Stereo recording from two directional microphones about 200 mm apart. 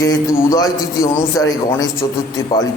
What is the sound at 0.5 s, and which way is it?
A man's voice, 20° left (ahead or behind).